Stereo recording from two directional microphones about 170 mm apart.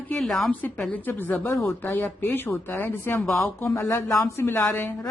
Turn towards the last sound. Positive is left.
turn(degrees=10)  # may be behind; listen again after turning